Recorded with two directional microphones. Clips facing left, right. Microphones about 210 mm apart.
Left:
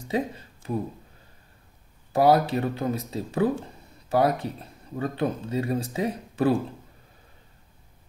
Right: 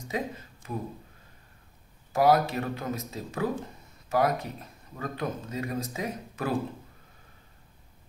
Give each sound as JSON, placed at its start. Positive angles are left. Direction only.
{"t": 0.1, "sound": "speech", "side_deg": 30}
{"t": 2.1, "sound": "speech", "side_deg": 30}